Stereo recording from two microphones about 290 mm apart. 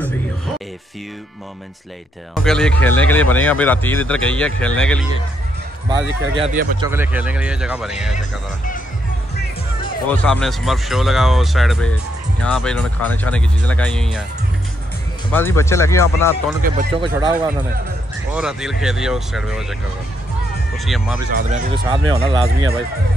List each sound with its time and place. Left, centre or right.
2.3 s speech: centre
5.9 s speech: centre
6.8 s speech: centre
8.2 s speech: left
10.0 s speech: centre
15.3 s speech: centre
16.6 s speech: right
17.1 s speech: centre
21.4 s speech: right